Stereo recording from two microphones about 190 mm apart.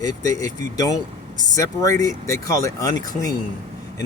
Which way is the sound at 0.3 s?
20° left (ahead or behind).